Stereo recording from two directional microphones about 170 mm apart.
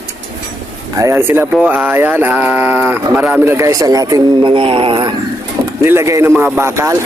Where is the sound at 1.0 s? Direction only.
15° right (ahead or behind); by 4.9 s 30° right (ahead or behind).